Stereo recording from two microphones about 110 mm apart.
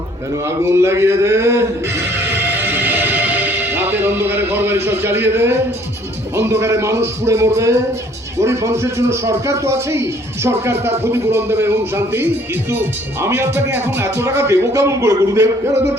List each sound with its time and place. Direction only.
0.4 s speech: 25° right (ahead or behind)